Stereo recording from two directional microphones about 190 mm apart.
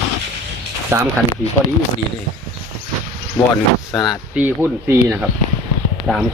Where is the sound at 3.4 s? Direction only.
5° left (ahead or behind).